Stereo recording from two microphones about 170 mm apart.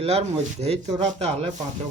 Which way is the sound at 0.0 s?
35° right (ahead or behind).